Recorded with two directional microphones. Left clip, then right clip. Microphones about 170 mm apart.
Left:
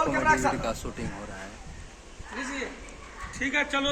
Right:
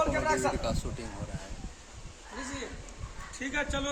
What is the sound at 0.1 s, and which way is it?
Speech, 5° right (ahead or behind).